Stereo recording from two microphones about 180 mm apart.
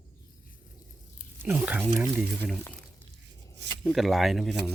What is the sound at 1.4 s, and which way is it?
Speech, 5° right (ahead or behind).